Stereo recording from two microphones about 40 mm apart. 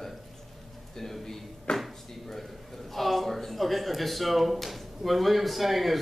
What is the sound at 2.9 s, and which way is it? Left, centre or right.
Speech, centre.